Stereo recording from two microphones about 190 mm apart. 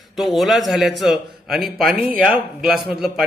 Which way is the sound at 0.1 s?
Centre (ahead or behind).